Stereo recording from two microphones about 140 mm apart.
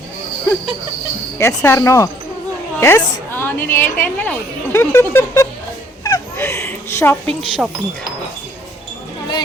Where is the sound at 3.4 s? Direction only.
15° left (ahead or behind).